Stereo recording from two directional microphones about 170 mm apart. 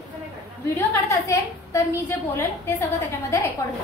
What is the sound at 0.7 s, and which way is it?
A woman's voice, 15° left (ahead or behind).